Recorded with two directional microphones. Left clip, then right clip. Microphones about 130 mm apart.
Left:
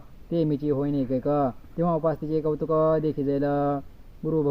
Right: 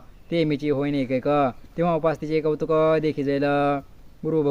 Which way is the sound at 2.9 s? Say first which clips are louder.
Right 2 dB; 55° right (ahead or behind).